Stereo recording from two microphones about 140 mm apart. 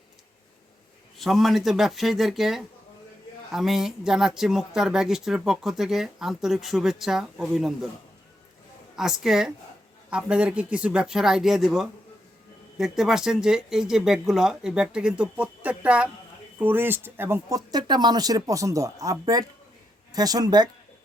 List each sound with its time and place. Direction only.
1.2 s speech: centre (ahead or behind)
9.0 s speech: 5° right (ahead or behind)
17.7 s speech: 30° right (ahead or behind)